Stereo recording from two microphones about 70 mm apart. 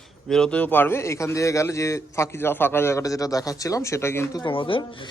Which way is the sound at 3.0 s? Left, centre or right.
Left.